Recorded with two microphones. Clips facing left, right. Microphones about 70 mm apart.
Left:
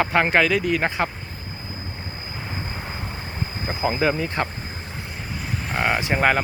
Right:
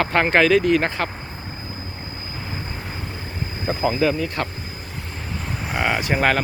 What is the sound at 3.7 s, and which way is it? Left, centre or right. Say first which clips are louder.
Speech: right 2 dB; centre.